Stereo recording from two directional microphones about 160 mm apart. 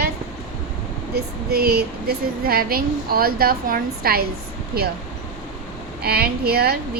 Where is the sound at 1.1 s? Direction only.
75° right (ahead or behind).